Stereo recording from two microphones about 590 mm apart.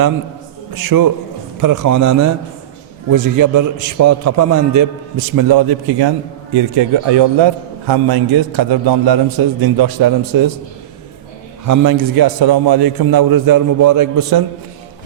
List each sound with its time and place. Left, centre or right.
0.8 s a man's voice: right
11.6 s a man's voice: right